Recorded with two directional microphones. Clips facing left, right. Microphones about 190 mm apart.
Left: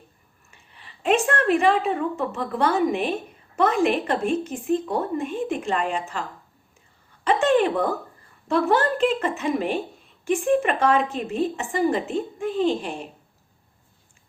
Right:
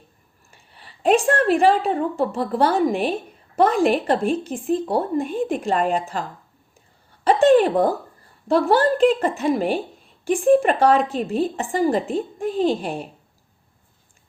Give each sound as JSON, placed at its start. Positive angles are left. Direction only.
{"t": 0.5, "sound": "a woman's voice", "side_deg": -35}
{"t": 7.3, "sound": "a sound", "side_deg": -40}
{"t": 8.4, "sound": "a woman's voice", "side_deg": -35}